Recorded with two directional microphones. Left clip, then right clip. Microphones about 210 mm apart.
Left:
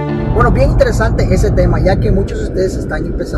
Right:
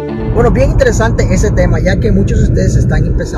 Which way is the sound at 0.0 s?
Centre (ahead or behind).